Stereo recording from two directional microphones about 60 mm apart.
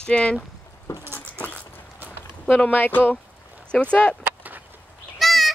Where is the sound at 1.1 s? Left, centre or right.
Left.